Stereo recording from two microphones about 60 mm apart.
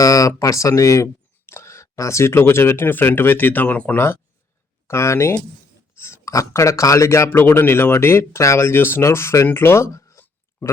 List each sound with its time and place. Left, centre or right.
0.0 s speech: left
3.9 s speech: left
4.9 s speech: left
6.0 s a sound: left
6.3 s a man's voice: left
7.3 s speech: left
9.0 s a man's voice: left
9.5 s speech: left